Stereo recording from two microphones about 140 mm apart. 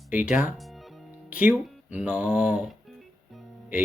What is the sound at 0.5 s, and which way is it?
Music, centre (ahead or behind).